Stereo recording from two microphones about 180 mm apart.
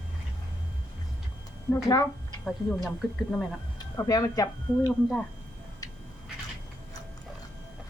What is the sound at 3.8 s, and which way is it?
Speech, 20° left (ahead or behind).